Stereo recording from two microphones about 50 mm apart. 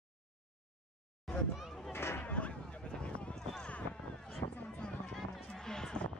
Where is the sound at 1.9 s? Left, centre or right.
Left.